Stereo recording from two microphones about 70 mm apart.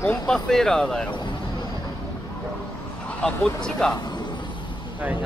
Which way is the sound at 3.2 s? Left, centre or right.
Centre.